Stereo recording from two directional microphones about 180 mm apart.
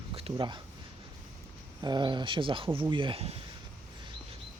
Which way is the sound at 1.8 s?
25° right (ahead or behind).